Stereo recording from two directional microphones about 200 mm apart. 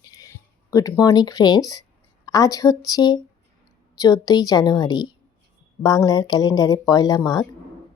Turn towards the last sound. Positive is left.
turn(degrees=20)  # may be behind; listen again after turning